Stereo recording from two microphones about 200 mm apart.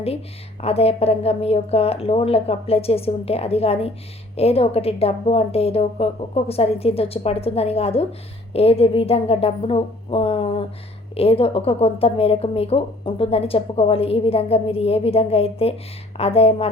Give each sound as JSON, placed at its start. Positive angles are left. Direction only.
{"t": 0.6, "sound": "a woman's voice", "side_deg": 30}